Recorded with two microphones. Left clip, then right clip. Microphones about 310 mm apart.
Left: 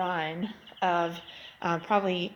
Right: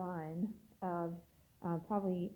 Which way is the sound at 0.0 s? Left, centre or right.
Centre.